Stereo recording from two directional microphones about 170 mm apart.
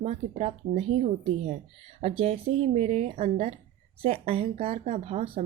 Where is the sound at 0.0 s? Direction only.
40° right (ahead or behind).